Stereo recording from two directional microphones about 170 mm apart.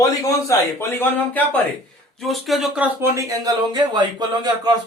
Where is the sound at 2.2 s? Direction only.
Centre (ahead or behind).